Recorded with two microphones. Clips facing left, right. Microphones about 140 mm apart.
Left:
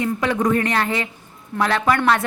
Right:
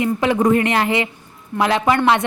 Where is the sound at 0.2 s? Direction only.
30° right (ahead or behind).